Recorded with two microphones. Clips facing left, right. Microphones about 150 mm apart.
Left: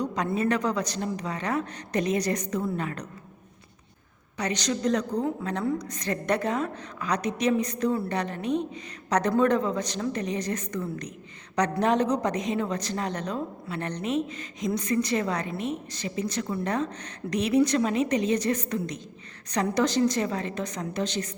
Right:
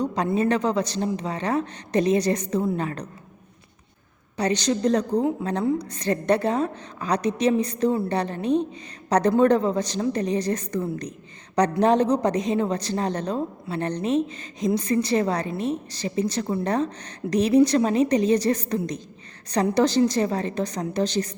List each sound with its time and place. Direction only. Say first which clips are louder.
0.3 s a woman's voice: right 4 dB; 30° right (ahead or behind)
4.4 s a woman's voice: right 6 dB; 30° right (ahead or behind)